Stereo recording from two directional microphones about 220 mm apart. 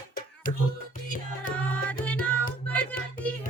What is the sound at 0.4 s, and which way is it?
Music, 40° left (ahead or behind).